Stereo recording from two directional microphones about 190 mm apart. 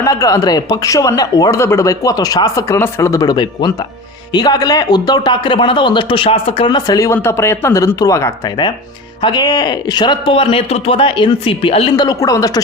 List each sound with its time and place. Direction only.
0.0 s speech: 15° left (ahead or behind)